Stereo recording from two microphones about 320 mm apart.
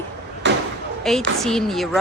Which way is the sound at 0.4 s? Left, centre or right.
Right.